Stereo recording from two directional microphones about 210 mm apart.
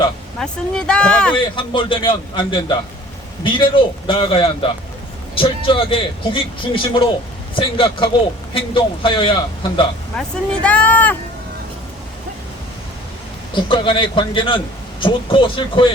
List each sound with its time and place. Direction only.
0.3 s speech: 5° left (ahead or behind)
1.5 s a man's voice: 25° left (ahead or behind)
10.2 s speech: 5° left (ahead or behind)
13.5 s a man's voice: 25° left (ahead or behind)